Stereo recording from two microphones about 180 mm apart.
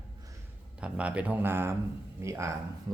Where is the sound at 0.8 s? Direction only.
5° right (ahead or behind).